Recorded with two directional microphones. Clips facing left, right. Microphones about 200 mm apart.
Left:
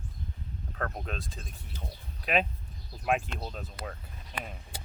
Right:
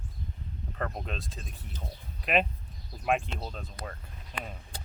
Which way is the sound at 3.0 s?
Centre (ahead or behind).